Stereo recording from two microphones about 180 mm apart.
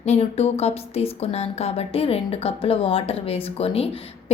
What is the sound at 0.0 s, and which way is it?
Speech, 35° left (ahead or behind).